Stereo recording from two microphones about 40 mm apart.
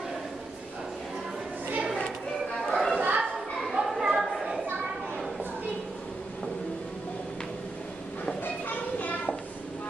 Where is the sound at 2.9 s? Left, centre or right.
Right.